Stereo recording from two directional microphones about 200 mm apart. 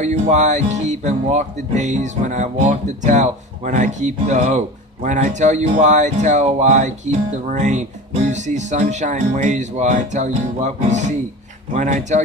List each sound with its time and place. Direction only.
0.0 s speech: 35° right (ahead or behind)